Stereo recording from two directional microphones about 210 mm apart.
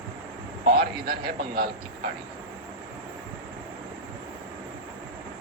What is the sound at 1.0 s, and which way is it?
Speech, 50° right (ahead or behind).